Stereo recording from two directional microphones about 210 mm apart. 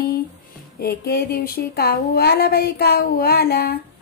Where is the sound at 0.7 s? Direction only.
45° left (ahead or behind).